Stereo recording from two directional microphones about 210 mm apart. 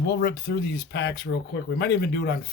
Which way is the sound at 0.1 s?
50° left (ahead or behind).